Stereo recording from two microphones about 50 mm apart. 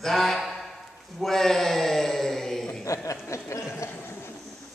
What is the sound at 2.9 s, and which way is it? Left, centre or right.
Snicker, left.